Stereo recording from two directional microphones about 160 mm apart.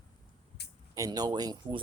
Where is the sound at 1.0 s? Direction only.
25° right (ahead or behind).